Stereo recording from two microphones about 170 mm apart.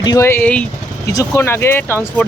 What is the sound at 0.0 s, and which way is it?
Speech, 20° left (ahead or behind).